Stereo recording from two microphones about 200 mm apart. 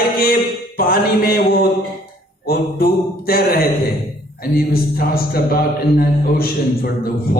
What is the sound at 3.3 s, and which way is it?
Speech, 50° left (ahead or behind).